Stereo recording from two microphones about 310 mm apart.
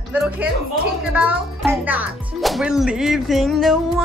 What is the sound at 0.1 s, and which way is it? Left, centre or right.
Speech, centre.